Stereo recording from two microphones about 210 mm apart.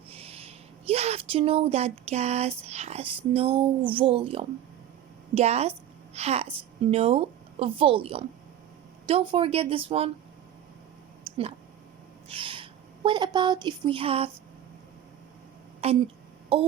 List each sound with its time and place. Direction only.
0.1 s speech: 30° right (ahead or behind)
11.2 s a sound: 30° right (ahead or behind)
12.3 s owl: 25° right (ahead or behind)
13.1 s speech: 20° right (ahead or behind)
15.8 s speech: 30° right (ahead or behind)